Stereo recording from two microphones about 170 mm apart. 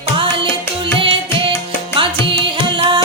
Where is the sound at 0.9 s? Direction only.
30° right (ahead or behind).